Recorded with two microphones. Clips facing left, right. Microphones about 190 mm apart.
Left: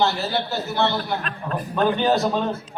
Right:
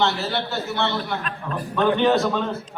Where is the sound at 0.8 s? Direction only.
35° left (ahead or behind).